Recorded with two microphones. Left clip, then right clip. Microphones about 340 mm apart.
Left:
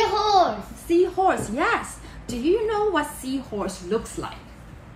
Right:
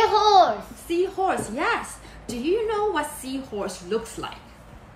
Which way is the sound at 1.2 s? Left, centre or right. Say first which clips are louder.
Left 2 dB; centre.